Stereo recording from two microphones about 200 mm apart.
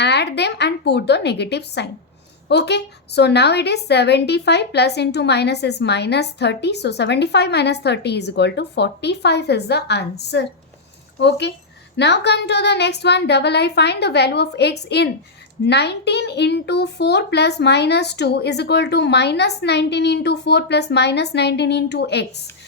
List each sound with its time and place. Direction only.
0.0 s a woman's voice: 55° left (ahead or behind)